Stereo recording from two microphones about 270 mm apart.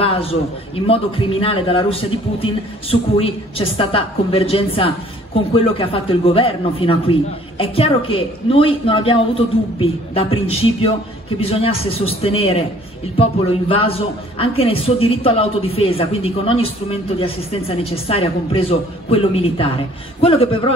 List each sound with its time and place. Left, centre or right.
0.0 s a woman's voice: left